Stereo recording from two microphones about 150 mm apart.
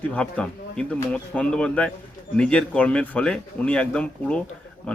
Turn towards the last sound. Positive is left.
turn(degrees=5)  # may be behind; listen again after turning